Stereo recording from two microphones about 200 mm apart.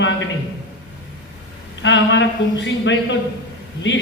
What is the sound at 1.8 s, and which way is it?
A man's voice, 65° left (ahead or behind).